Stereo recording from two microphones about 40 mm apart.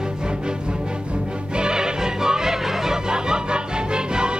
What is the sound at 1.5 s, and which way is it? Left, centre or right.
Music, centre.